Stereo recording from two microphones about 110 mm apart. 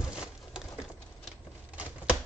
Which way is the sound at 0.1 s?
5° right (ahead or behind).